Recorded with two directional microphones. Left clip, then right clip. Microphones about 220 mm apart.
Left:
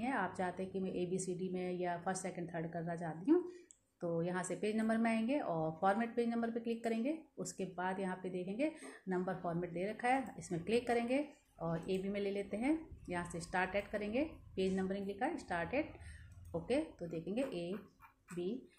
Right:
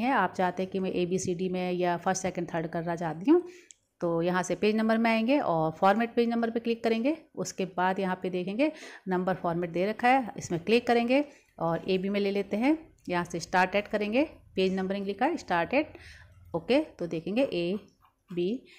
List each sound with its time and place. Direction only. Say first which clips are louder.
0.0 s a woman's voice: right 12 dB; 40° right (ahead or behind)